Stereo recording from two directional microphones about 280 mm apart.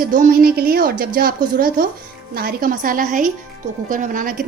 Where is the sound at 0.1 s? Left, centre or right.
Right.